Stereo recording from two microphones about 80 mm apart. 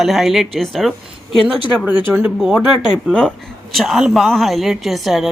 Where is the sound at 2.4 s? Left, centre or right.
Centre.